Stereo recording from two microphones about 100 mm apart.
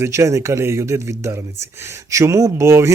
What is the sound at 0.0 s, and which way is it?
Speech, 30° right (ahead or behind).